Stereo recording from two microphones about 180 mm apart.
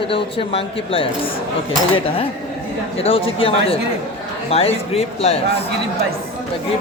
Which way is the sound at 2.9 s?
30° left (ahead or behind).